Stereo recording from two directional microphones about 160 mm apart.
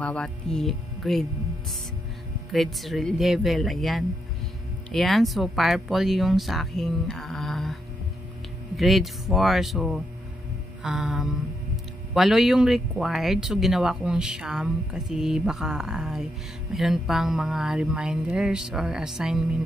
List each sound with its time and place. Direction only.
0.0 s speech: 5° left (ahead or behind)
2.5 s speech: centre (ahead or behind)
8.7 s speech: centre (ahead or behind)